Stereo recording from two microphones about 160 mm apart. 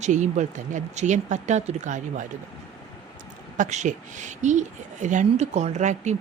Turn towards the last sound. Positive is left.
turn(degrees=-45)  # may be behind; listen again after turning